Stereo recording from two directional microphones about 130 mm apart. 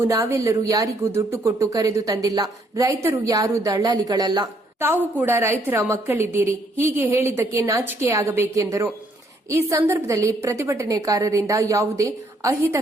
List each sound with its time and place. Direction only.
0.0 s speech: 20° right (ahead or behind)
4.8 s speech: 15° right (ahead or behind)